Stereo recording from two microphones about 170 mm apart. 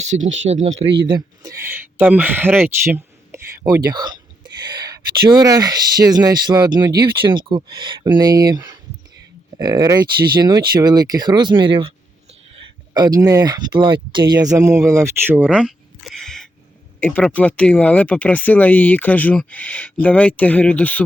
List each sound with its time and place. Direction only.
0.0 s speech: 45° right (ahead or behind)
0.9 s speech: 25° right (ahead or behind); by 2.6 s 10° right (ahead or behind)
2.6 s a sound: 15° right (ahead or behind)
3.8 s speech: 25° right (ahead or behind)
12.9 s speech: 20° right (ahead or behind)
15.4 s speech: 5° right (ahead or behind)